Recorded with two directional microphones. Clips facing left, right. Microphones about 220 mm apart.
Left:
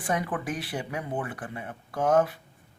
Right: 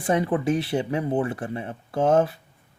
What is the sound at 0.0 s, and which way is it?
Speech, 25° right (ahead or behind).